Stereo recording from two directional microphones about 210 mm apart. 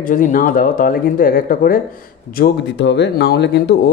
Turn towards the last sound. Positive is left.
turn(degrees=55)  # may be behind; listen again after turning